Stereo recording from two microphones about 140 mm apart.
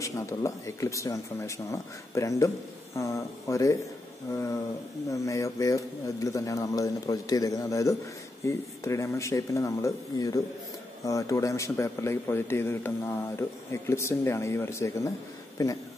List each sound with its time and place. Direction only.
0.0 s a man's voice: 20° left (ahead or behind)